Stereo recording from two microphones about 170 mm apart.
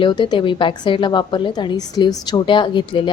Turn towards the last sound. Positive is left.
turn(degrees=30)  # may be behind; listen again after turning